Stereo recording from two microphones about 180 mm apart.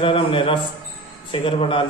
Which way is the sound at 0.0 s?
30° left (ahead or behind).